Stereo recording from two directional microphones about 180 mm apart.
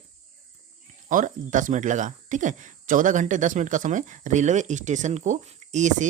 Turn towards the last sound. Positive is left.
turn(degrees=-40)  # may be behind; listen again after turning